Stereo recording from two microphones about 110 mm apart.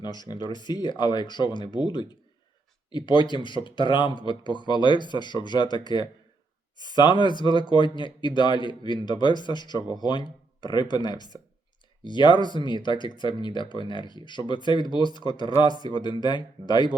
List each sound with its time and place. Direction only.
0.0 s speech: 40° left (ahead or behind)